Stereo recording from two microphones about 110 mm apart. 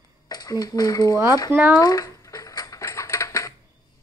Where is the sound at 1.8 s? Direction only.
35° left (ahead or behind).